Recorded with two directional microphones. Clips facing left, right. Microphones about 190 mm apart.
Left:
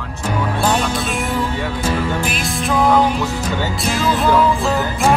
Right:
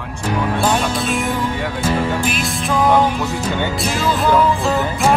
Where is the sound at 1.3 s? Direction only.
15° right (ahead or behind).